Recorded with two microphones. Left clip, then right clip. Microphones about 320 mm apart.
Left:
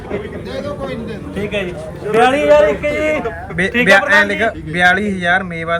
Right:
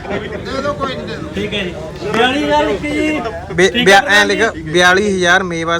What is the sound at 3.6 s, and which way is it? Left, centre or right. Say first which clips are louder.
A man's voice: right 2 dB; centre.